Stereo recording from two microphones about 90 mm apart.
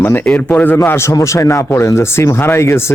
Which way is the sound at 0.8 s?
30° left (ahead or behind).